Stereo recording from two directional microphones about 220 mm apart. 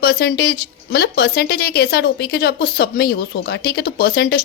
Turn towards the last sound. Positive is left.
turn(degrees=45)  # may be behind; listen again after turning